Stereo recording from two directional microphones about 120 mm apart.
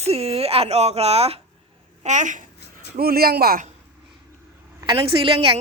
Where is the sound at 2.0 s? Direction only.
85° right.